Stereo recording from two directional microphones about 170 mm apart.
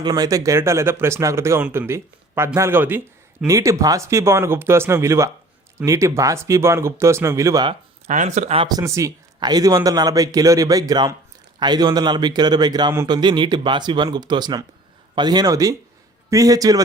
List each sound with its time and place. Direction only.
0.0 s speech: 20° right (ahead or behind)
7.7 s speech: 40° right (ahead or behind)
8.6 s speech: 20° right (ahead or behind)